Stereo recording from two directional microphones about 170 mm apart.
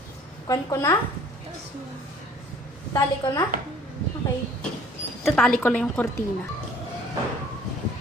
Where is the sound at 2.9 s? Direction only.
20° left (ahead or behind).